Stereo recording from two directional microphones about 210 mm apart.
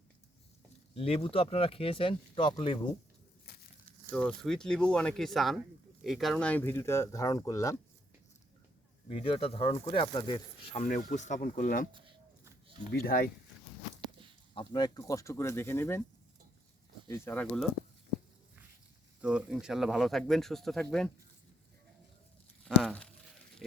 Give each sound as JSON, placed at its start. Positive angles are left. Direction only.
{"t": 0.9, "sound": "speech", "side_deg": 25}
{"t": 4.1, "sound": "speech", "side_deg": 5}
{"t": 9.0, "sound": "speech", "side_deg": 25}
{"t": 10.8, "sound": "speech", "side_deg": 35}
{"t": 12.9, "sound": "speech", "side_deg": 45}
{"t": 14.0, "sound": "a sound", "side_deg": -25}
{"t": 14.5, "sound": "speech", "side_deg": 20}
{"t": 17.1, "sound": "speech", "side_deg": 10}
{"t": 19.2, "sound": "speech", "side_deg": -5}
{"t": 22.8, "sound": "speech", "side_deg": 0}